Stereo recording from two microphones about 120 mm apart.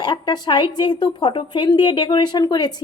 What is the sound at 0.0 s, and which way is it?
A woman's voice, 40° left (ahead or behind).